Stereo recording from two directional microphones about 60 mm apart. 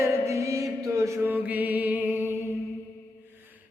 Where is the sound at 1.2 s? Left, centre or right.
Right.